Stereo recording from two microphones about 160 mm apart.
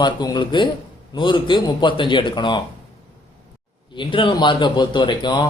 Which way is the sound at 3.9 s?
30° left (ahead or behind).